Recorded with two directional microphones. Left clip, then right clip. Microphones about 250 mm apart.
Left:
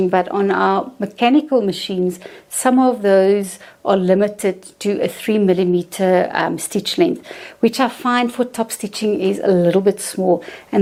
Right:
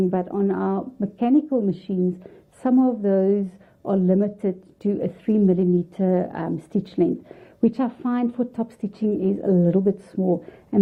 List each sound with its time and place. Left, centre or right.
0.1 s speech: centre
10.2 s speech: left